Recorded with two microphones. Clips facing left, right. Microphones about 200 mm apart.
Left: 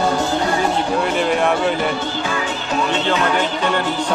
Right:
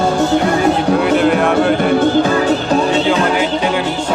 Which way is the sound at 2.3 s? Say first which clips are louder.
Right 9 dB; 40° right (ahead or behind).